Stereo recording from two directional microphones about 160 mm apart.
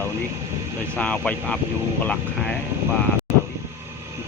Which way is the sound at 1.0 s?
5° left (ahead or behind).